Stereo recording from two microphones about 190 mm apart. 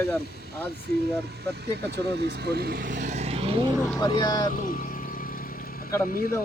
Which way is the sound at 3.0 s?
35° right (ahead or behind).